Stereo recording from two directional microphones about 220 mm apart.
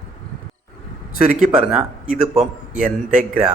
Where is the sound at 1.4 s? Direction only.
5° right (ahead or behind).